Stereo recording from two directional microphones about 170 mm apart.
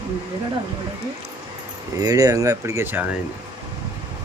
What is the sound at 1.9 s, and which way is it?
Speech, 20° right (ahead or behind).